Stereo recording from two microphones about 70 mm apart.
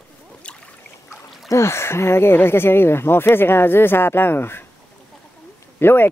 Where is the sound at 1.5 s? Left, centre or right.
Left.